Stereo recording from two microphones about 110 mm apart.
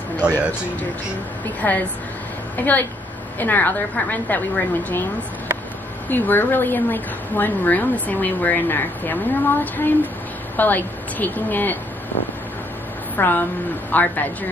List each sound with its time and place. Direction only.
0.2 s speech: 10° right (ahead or behind)
1.6 s a woman's voice: 15° left (ahead or behind)
6.0 s a woman's voice: 15° left (ahead or behind)
13.1 s a woman's voice: 15° left (ahead or behind)